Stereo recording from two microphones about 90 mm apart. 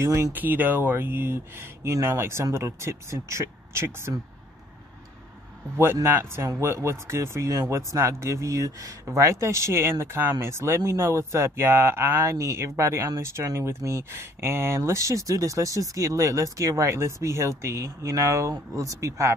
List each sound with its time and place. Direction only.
0.0 s speech: 30° right (ahead or behind)
0.3 s speech: 20° right (ahead or behind)
6.6 s speech: 30° right (ahead or behind)